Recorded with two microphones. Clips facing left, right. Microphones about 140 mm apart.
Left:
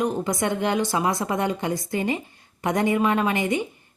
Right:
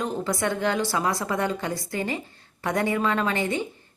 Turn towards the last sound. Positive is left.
turn(degrees=15)  # may be behind; listen again after turning